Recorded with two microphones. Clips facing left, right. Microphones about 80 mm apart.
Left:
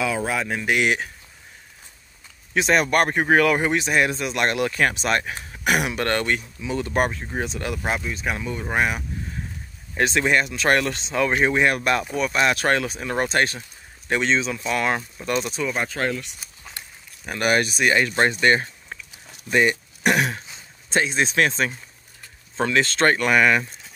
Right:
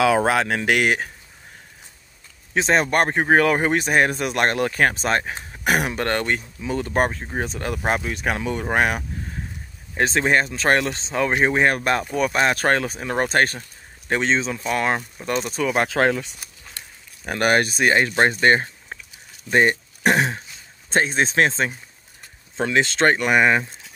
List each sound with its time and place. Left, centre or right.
0.0 s speech: right
2.5 s speech: right
8.1 s speech: right
9.9 s speech: right
15.6 s speech: right
17.3 s speech: right
20.9 s speech: right